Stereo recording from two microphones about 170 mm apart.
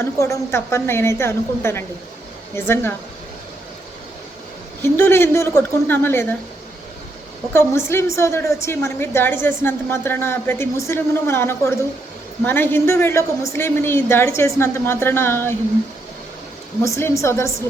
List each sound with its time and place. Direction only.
0.0 s a woman's voice: 15° left (ahead or behind)
4.8 s a woman's voice: 15° left (ahead or behind)
7.5 s a woman's voice: 15° left (ahead or behind)
16.8 s a woman's voice: 15° left (ahead or behind)